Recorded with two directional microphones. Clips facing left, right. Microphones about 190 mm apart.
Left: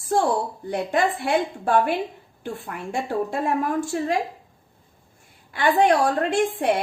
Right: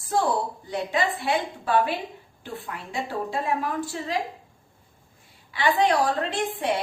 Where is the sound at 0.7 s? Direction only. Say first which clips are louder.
Left 4 dB; 50° left (ahead or behind).